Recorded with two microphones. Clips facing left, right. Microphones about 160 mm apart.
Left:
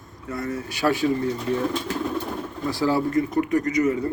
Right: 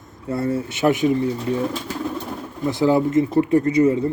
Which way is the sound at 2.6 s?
20° right (ahead or behind).